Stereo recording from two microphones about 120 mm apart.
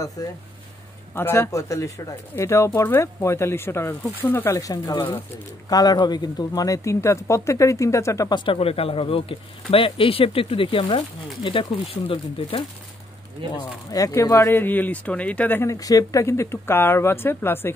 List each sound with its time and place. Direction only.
0.2 s speech: 30° left (ahead or behind)
1.1 s speech: 20° left (ahead or behind)
8.5 s speech: 55° left (ahead or behind)
13.6 s speech: 30° left (ahead or behind)